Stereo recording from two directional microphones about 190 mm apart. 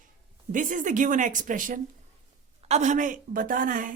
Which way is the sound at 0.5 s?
45° right (ahead or behind).